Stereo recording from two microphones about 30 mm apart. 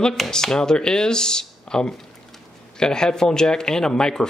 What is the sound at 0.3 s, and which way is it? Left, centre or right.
Speech, left.